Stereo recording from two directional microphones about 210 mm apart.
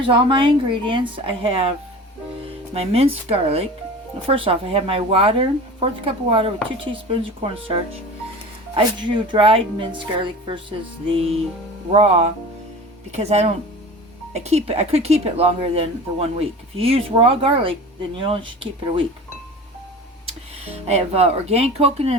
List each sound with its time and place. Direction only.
0.0 s a woman's voice: 25° right (ahead or behind)
2.7 s a woman's voice: 30° right (ahead or behind)
11.9 s a woman's voice: 30° right (ahead or behind)
20.7 s a woman's voice: 30° right (ahead or behind)